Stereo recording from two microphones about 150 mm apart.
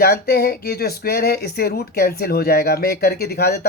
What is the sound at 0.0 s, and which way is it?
Speech, 90° left.